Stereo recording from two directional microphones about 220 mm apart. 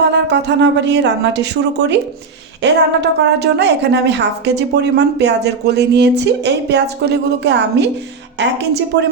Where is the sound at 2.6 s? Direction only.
50° right (ahead or behind).